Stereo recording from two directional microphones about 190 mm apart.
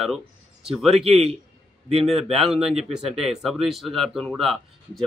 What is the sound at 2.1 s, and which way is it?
Speech, centre (ahead or behind).